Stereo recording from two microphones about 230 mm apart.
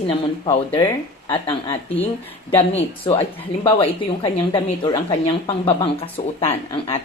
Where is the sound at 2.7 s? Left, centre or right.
Left.